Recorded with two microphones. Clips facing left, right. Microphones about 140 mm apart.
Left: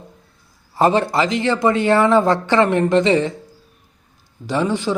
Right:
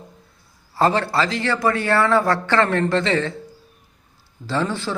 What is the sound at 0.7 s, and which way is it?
Speech, 20° left (ahead or behind).